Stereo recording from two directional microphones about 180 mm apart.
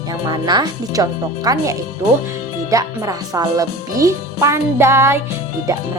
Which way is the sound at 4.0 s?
15° right (ahead or behind).